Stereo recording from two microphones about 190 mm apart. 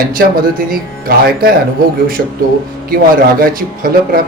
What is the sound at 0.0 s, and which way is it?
Speech, 50° right (ahead or behind).